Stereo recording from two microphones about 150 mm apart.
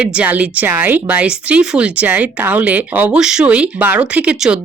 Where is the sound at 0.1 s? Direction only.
10° right (ahead or behind).